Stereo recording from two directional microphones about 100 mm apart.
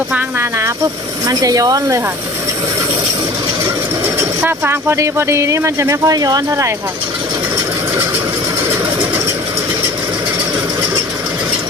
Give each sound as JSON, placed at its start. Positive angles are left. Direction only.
{"t": 1.3, "sound": "speech", "side_deg": -35}
{"t": 4.4, "sound": "speech", "side_deg": -25}